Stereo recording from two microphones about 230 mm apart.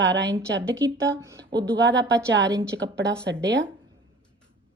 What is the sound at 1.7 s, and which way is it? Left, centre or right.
Speech, right.